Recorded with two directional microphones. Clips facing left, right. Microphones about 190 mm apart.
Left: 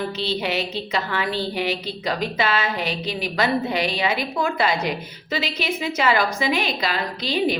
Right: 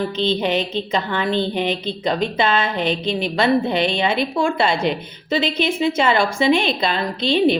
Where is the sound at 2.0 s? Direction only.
30° right (ahead or behind).